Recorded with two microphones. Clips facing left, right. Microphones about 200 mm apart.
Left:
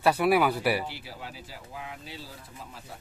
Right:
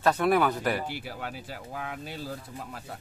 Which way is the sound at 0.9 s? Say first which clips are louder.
Right 5 dB; 50° right (ahead or behind).